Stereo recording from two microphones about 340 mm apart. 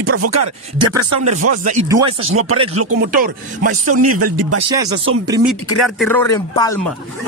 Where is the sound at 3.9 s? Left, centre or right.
Right.